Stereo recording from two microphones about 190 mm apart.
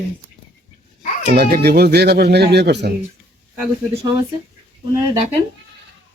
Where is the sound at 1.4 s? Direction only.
55° right (ahead or behind).